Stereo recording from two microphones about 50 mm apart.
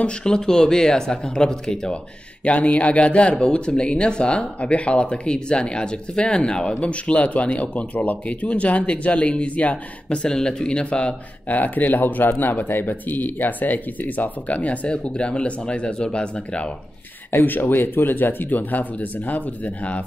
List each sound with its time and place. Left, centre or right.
0.0 s speech: centre
2.4 s speech: left
17.3 s speech: left